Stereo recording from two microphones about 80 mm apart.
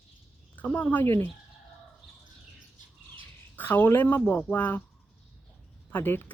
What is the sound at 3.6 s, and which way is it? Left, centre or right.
Speech, left.